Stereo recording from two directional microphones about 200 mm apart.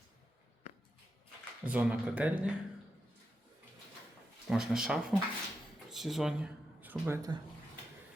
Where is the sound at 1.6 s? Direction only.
5° right (ahead or behind).